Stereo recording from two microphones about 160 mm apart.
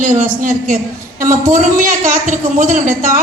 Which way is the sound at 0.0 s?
55° right (ahead or behind).